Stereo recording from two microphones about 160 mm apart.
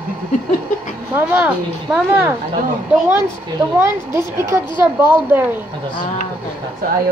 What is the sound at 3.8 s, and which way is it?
A woman's voice, 15° right (ahead or behind).